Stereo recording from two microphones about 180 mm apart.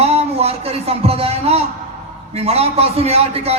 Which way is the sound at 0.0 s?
35° right (ahead or behind).